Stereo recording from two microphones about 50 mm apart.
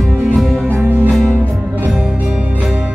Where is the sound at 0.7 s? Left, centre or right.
Right.